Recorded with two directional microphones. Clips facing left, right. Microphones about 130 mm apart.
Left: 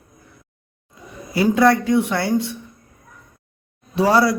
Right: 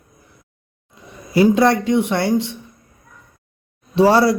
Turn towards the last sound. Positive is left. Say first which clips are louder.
# right 3 dB
turn(degrees=-30)  # may be behind; listen again after turning